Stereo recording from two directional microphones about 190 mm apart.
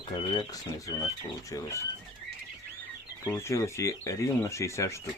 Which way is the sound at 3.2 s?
15° left (ahead or behind).